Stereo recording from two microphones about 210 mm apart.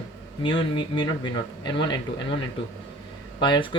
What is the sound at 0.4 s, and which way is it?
Speech, 25° left (ahead or behind).